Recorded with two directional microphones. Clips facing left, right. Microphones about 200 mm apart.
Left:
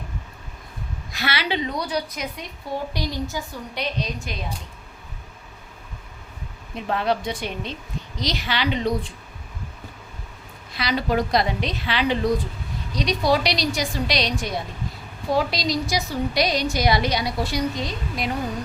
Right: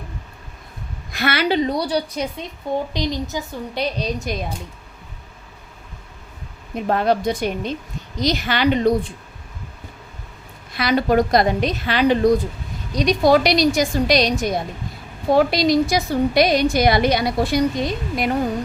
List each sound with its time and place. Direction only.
1.1 s a woman's voice: 50° right (ahead or behind); by 3.4 s 20° right (ahead or behind)
3.8 s a woman's voice: 35° right (ahead or behind)
6.7 s a woman's voice: 45° right (ahead or behind)
10.8 s a woman's voice: 50° right (ahead or behind)
15.3 s a woman's voice: 55° right (ahead or behind)